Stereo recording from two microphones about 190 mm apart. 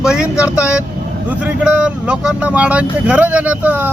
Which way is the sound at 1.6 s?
5° right (ahead or behind).